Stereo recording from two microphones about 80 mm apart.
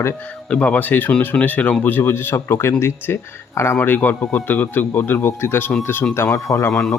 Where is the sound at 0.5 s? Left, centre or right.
Centre; by 3.8 s left.